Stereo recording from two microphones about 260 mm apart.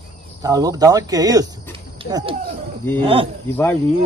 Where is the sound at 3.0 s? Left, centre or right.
Centre.